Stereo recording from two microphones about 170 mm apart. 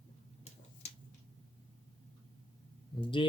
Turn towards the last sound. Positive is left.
turn(degrees=30)  # may be behind; listen again after turning